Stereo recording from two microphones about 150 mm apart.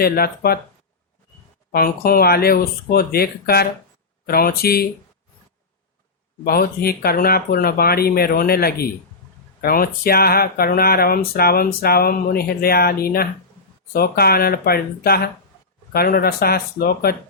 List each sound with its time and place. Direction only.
0.0 s speech: 90° left
1.7 s speech: 90° left
6.4 s speech: 90° left